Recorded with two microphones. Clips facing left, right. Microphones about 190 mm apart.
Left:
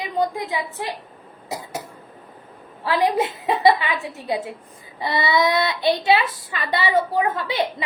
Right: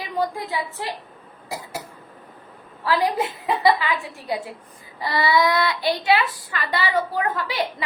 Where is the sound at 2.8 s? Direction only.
25° left (ahead or behind).